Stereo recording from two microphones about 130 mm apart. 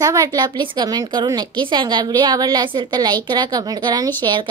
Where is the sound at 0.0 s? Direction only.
25° right (ahead or behind).